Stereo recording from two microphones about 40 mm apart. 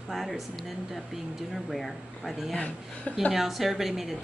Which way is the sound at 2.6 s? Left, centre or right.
Left.